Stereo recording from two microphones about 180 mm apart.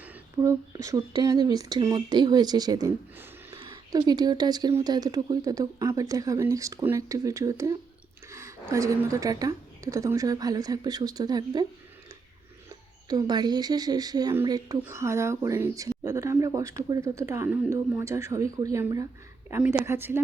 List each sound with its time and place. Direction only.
0.0 s a woman's voice: 15° right (ahead or behind)
13.1 s a woman's voice: 25° right (ahead or behind)